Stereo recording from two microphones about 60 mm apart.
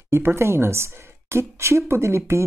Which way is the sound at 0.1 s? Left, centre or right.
Right.